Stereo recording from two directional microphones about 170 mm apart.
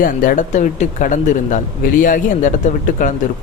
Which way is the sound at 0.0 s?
50° left (ahead or behind).